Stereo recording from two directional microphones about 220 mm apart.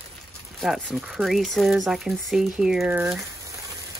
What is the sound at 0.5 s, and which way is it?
Speech, centre (ahead or behind).